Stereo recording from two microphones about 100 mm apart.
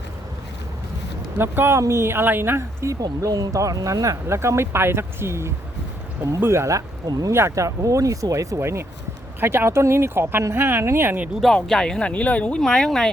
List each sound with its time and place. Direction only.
1.4 s speech: 20° right (ahead or behind)
11.3 s speech: 5° left (ahead or behind)